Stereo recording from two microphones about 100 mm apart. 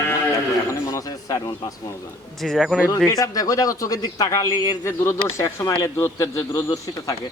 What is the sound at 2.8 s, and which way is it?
Speech, 35° left (ahead or behind).